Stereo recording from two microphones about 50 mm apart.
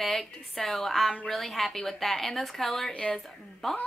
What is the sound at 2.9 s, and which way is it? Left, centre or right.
Speech, centre.